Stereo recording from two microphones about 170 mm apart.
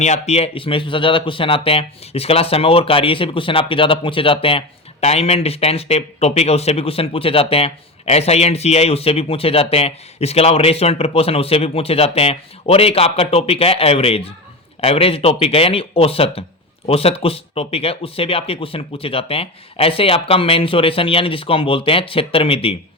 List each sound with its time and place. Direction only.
0.0 s speech: 40° left (ahead or behind)